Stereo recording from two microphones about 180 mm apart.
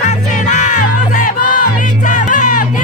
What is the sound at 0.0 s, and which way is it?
Music, 40° left (ahead or behind).